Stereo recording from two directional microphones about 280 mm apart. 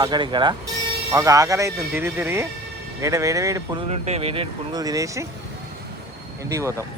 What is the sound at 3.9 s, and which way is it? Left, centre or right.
Speech, right.